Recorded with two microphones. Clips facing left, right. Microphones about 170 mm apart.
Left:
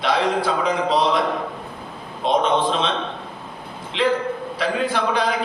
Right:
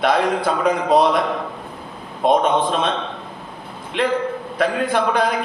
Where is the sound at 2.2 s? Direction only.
55° right (ahead or behind).